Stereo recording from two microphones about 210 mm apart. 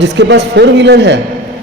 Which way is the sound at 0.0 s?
55° right (ahead or behind).